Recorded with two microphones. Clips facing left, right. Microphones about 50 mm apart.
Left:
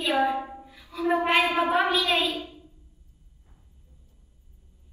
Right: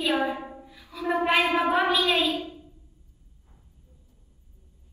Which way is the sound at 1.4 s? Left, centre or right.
Right.